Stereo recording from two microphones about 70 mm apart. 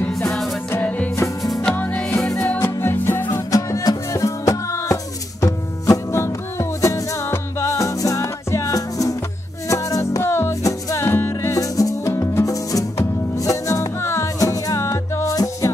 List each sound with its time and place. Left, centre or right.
0.7 s music: left
3.5 s music: left
5.4 s music: left
10.2 s music: left
10.6 s music: left
11.1 s music: left
11.5 s music: left
14.4 s music: left